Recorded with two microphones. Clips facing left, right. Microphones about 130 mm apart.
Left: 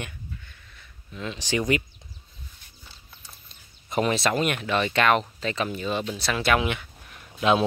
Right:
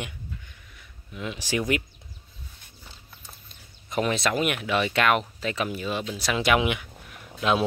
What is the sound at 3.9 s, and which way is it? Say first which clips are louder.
Speech: left 1 dB; centre (ahead or behind).